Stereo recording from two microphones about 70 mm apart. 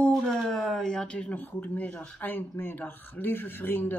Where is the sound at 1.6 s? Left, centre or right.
Left.